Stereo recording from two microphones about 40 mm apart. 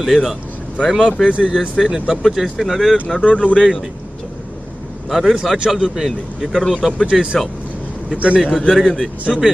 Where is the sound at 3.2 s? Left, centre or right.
Left.